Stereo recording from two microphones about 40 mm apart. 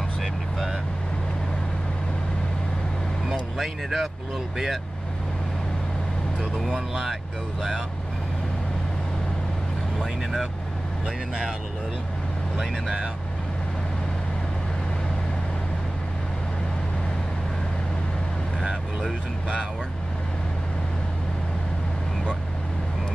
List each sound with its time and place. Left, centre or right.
3.5 s speech: centre
6.6 s speech: centre
9.9 s speech: centre
12.5 s speech: centre